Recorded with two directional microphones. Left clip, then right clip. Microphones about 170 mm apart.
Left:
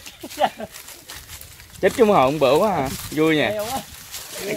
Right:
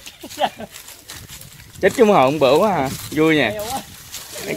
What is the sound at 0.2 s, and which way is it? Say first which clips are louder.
Speech: even; 5° right (ahead or behind).